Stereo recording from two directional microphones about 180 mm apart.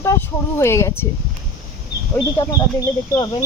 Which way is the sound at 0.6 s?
15° left (ahead or behind).